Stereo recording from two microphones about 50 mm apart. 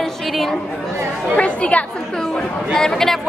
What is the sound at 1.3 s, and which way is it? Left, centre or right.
Speech, left.